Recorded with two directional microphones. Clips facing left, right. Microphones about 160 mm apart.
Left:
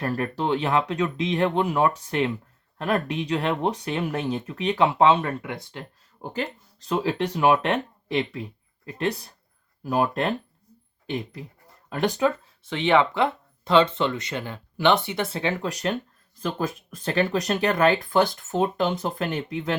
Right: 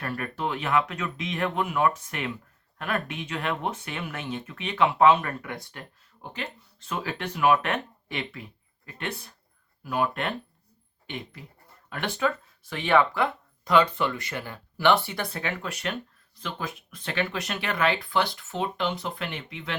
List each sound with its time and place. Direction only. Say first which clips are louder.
0.0 s speech: left 5 dB; 30° left (ahead or behind)
6.3 s speech: left 7 dB; 35° left (ahead or behind)
11.9 s speech: left 8 dB; 35° left (ahead or behind)
12.2 s speech: left 4 dB; 25° left (ahead or behind); by 19.7 s 40° left (ahead or behind)